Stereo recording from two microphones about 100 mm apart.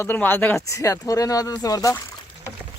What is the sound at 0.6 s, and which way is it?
Speech, 35° left (ahead or behind).